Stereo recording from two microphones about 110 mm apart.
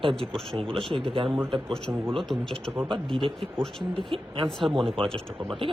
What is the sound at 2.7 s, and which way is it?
Speech, 20° right (ahead or behind).